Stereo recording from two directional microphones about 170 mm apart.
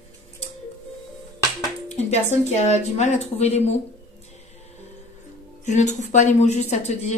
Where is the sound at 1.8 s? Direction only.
40° left (ahead or behind).